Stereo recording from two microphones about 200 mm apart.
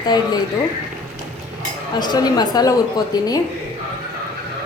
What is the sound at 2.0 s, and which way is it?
A woman's voice, 20° left (ahead or behind).